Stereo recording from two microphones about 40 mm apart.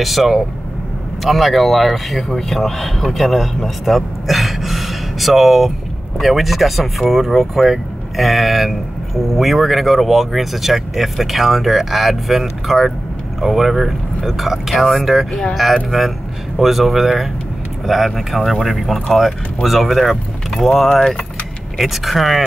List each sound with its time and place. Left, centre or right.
0.0 s speech: centre